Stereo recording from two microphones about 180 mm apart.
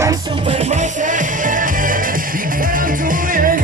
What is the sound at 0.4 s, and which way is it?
Music, 35° right (ahead or behind).